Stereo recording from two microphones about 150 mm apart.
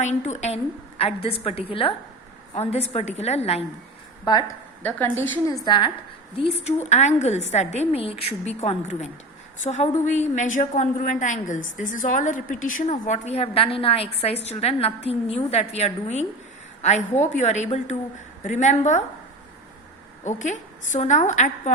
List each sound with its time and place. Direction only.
0.0 s a woman's voice: 50° left (ahead or behind)
4.8 s a woman's voice: 10° left (ahead or behind)
5.6 s a woman's voice: 30° left (ahead or behind); by 19.0 s 50° left (ahead or behind)
20.2 s a woman's voice: 55° left (ahead or behind)